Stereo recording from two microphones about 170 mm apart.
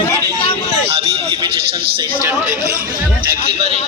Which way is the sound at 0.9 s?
35° right (ahead or behind).